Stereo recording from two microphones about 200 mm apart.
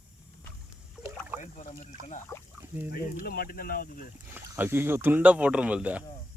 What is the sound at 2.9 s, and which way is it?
Speech, 50° left (ahead or behind).